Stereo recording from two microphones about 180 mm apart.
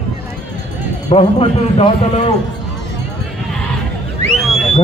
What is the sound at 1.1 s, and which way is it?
A man's voice, 30° left (ahead or behind).